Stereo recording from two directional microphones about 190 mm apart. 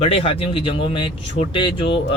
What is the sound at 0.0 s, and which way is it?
Speech, 30° left (ahead or behind).